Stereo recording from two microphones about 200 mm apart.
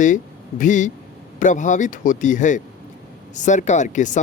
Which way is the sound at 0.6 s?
40° left (ahead or behind).